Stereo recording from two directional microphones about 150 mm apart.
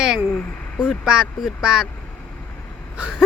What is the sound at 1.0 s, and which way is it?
Speech, 5° right (ahead or behind).